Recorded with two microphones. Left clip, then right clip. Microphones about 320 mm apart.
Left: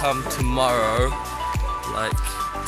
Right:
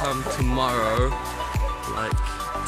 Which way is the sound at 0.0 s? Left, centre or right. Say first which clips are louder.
Left 2 dB; centre.